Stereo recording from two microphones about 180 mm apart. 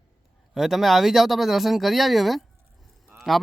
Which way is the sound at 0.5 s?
Centre (ahead or behind).